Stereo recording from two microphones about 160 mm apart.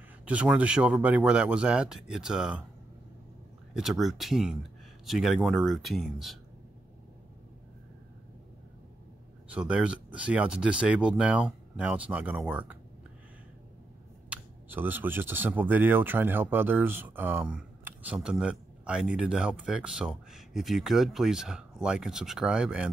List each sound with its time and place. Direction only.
0.2 s speech: 10° right (ahead or behind)
3.7 s speech: centre (ahead or behind)
9.5 s speech: 5° right (ahead or behind)
14.3 s speech: 10° right (ahead or behind)